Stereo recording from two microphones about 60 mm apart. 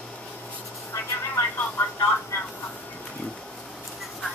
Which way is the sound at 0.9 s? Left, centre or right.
Left.